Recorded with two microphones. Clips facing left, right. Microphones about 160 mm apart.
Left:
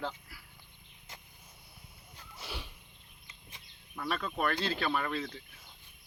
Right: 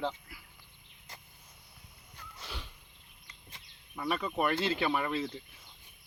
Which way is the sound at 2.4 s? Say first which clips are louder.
Left 2 dB; 10° left (ahead or behind).